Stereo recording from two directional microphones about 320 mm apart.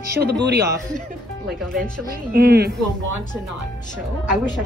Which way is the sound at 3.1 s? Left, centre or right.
Right.